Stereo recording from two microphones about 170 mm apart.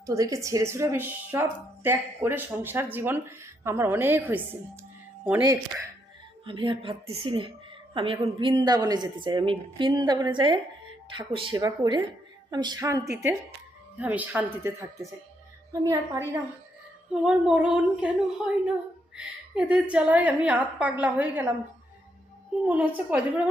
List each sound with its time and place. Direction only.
0.0 s a woman's voice: 20° right (ahead or behind)
6.4 s a woman's voice: 30° right (ahead or behind)
17.2 s a woman's voice: 5° right (ahead or behind)
22.6 s a woman's voice: 10° right (ahead or behind)